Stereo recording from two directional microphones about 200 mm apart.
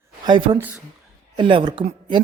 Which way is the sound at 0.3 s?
25° right (ahead or behind).